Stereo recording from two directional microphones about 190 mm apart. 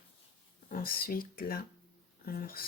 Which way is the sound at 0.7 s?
50° left (ahead or behind).